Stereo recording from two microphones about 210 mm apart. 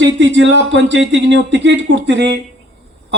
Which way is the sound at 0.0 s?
60° right (ahead or behind).